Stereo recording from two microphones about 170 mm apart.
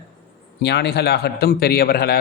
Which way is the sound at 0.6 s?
80° left.